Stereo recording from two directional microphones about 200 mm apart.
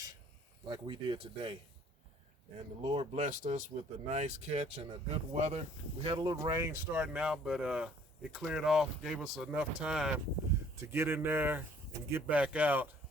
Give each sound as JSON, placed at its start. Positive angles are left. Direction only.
{"t": 0.7, "sound": "speech", "side_deg": -20}
{"t": 2.8, "sound": "speech", "side_deg": -30}
{"t": 6.3, "sound": "speech", "side_deg": -20}
{"t": 7.0, "sound": "speech", "side_deg": -5}